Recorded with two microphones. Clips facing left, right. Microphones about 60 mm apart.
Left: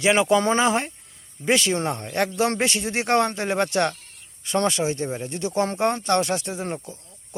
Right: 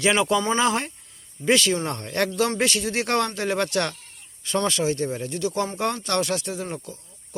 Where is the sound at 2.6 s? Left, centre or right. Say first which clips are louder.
Even; left.